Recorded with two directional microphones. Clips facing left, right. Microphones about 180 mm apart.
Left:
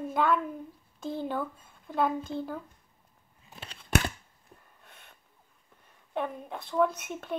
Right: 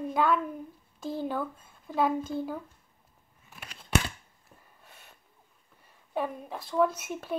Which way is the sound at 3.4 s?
25° left (ahead or behind).